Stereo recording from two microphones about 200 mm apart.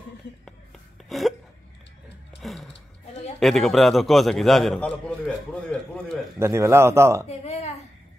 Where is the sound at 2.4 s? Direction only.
Centre (ahead or behind).